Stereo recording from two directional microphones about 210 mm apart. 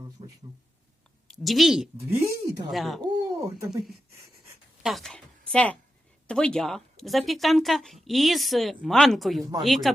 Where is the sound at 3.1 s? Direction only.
15° right (ahead or behind).